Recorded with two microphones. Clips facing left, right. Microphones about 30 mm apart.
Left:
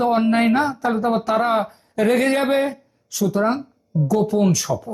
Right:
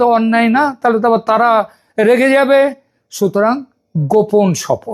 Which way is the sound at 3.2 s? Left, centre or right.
Right.